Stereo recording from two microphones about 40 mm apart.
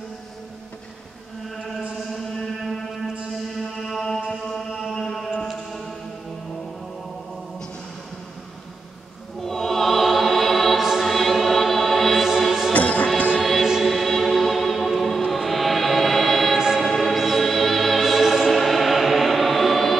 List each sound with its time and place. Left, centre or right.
2.6 s a sound: centre
3.5 s music: centre
5.0 s a sound: centre
9.4 s choir: centre
12.7 s music: left
13.4 s music: centre
16.5 s music: centre
16.8 s music: centre